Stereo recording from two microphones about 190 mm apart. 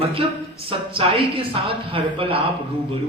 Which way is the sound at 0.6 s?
30° right (ahead or behind).